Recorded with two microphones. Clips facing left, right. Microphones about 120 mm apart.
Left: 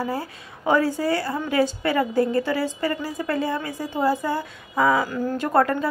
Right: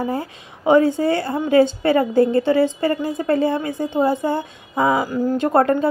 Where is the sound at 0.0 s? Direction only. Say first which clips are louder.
Right 4 dB; 20° right (ahead or behind).